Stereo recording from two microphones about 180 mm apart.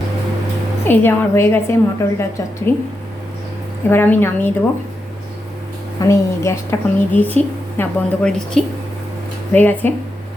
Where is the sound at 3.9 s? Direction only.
10° left (ahead or behind).